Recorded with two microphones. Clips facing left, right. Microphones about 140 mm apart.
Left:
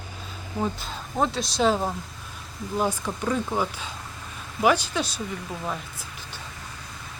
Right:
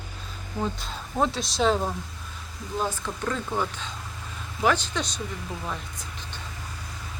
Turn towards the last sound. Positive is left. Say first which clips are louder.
# even
turn(degrees=5)  # may be behind; listen again after turning